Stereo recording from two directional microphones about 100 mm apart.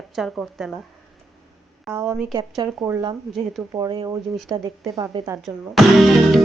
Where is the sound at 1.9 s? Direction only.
25° right (ahead or behind).